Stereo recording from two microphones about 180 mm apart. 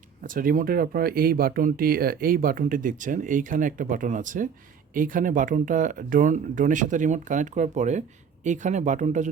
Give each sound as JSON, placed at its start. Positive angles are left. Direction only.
{"t": 0.2, "sound": "speech", "side_deg": -50}